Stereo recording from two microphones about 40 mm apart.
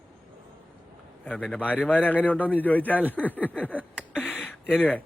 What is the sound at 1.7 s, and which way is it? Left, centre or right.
A man's voice, left.